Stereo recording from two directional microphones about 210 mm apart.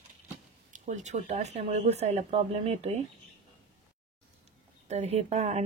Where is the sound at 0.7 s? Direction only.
35° right (ahead or behind).